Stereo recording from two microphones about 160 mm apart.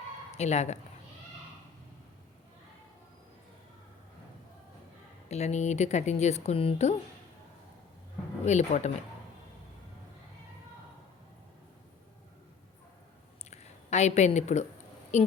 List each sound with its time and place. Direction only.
0.3 s speech: 45° left (ahead or behind)
5.3 s speech: 45° left (ahead or behind)
8.4 s speech: 45° left (ahead or behind)
13.5 s a sound: 45° left (ahead or behind)
15.1 s a woman's voice: 45° left (ahead or behind)